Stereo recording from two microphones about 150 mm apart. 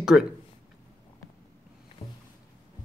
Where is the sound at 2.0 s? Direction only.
40° left (ahead or behind).